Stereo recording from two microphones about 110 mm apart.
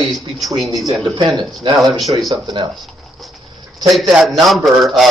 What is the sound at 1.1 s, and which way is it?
Speech, 40° right (ahead or behind).